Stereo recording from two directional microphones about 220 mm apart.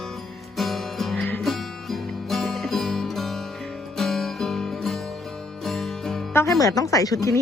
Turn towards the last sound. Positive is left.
turn(degrees=15)  # may be behind; listen again after turning